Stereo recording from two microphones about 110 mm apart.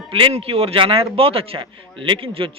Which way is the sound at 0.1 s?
55° right (ahead or behind).